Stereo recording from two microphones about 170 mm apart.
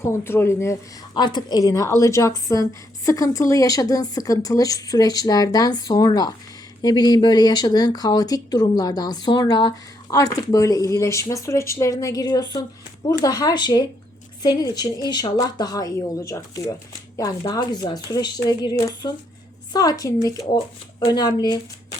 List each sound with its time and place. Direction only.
0.0 s speech: 15° left (ahead or behind)
1.1 s speech: 25° left (ahead or behind)